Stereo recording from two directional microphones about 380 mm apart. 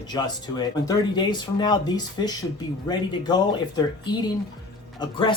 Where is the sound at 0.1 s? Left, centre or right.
Centre.